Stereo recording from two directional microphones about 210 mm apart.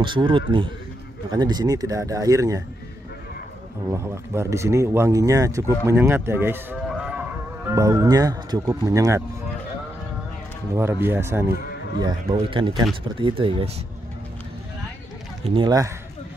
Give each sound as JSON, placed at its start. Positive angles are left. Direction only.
{"t": 0.0, "sound": "speech", "side_deg": -25}
{"t": 3.9, "sound": "speech", "side_deg": -15}
{"t": 10.7, "sound": "speech", "side_deg": -10}
{"t": 12.0, "sound": "speech", "side_deg": -20}
{"t": 15.4, "sound": "speech", "side_deg": -25}